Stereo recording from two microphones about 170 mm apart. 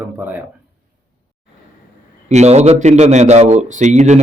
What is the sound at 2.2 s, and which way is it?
A man's voice, 40° right (ahead or behind).